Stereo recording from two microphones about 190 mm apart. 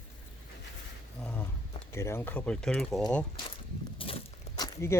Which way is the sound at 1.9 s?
15° left (ahead or behind).